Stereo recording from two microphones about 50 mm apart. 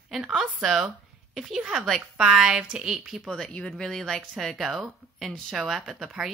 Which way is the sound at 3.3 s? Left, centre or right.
Centre.